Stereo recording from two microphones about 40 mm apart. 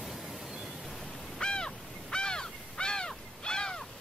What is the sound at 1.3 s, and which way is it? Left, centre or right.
Crow, centre.